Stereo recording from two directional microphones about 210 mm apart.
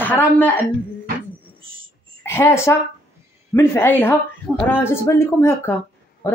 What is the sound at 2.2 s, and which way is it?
Speech, 15° left (ahead or behind).